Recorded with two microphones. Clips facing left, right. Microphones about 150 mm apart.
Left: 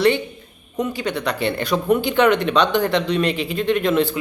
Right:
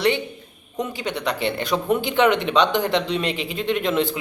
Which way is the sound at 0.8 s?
20° right (ahead or behind).